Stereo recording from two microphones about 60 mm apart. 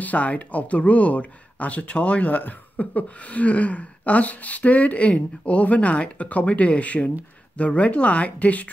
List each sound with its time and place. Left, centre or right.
0.0 s speech: left